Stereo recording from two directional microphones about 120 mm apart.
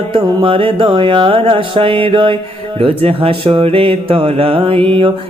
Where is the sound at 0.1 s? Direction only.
45° right (ahead or behind).